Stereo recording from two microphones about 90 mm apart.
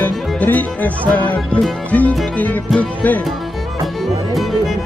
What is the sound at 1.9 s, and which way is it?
Music, 15° left (ahead or behind).